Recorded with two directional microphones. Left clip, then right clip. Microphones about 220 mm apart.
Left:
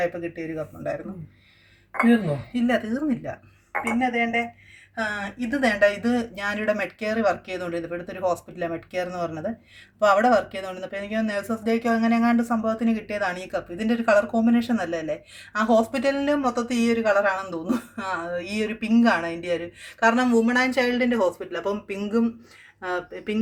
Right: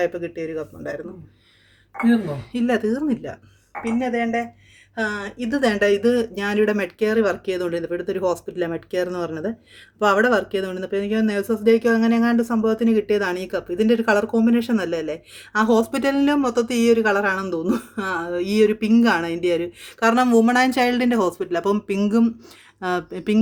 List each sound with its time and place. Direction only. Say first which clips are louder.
0.0 s speech: right 3 dB; 55° right (ahead or behind)
2.5 s speech: right 4 dB; 50° right (ahead or behind)